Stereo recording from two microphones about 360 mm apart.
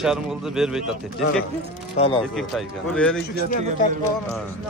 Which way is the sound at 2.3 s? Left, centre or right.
Centre.